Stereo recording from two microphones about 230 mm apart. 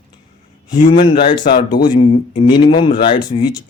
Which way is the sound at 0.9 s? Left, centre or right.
Left.